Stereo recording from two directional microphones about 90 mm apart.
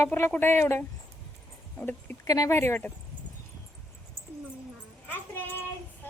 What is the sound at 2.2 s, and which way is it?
Speech, 45° left (ahead or behind).